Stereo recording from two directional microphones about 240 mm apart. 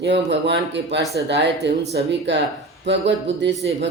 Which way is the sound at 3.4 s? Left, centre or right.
Right.